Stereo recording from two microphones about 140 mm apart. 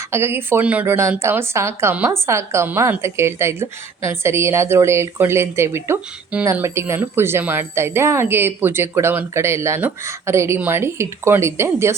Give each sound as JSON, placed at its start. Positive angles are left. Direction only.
{"t": 0.1, "sound": "a woman's voice", "side_deg": -15}